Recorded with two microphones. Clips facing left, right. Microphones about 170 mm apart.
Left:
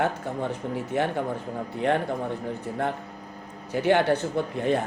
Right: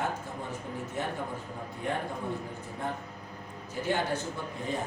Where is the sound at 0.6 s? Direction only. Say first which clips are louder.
Left 8 dB; 75° left (ahead or behind).